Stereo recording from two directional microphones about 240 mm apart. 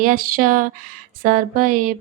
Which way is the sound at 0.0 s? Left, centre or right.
Right.